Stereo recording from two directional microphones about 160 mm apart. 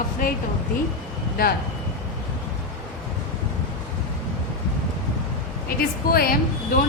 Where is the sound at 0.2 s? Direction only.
60° left (ahead or behind).